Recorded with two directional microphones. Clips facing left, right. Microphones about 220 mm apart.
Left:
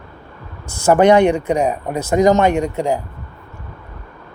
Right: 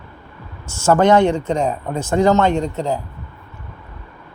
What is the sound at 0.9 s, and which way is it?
Speech, 15° left (ahead or behind).